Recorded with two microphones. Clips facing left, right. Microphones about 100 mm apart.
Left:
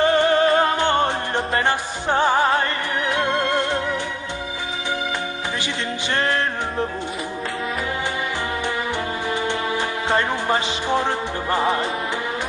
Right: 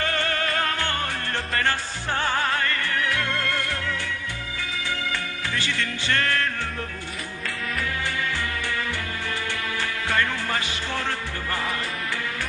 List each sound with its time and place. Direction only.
0.0 s music: 20° left (ahead or behind)
5.5 s music: 20° left (ahead or behind)
10.1 s music: 20° left (ahead or behind)